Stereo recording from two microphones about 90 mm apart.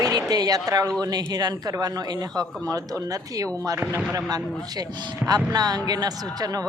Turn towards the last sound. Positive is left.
turn(degrees=-45)  # may be behind; listen again after turning